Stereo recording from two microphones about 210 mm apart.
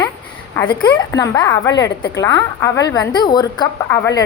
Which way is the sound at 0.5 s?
20° left (ahead or behind).